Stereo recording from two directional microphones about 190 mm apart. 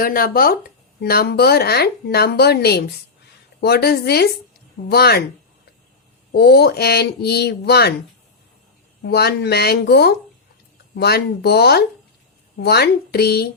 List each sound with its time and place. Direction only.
0.0 s speech: 50° left (ahead or behind)
6.3 s speech: 60° left (ahead or behind)
9.0 s speech: 55° left (ahead or behind)